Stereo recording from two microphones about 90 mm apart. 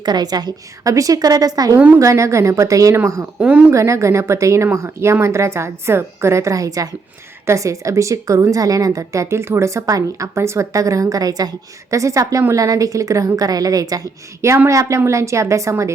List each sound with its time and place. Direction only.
0.0 s a woman's voice: 50° right (ahead or behind)
3.3 s speech: 15° right (ahead or behind)
3.7 s a woman's voice: 35° right (ahead or behind)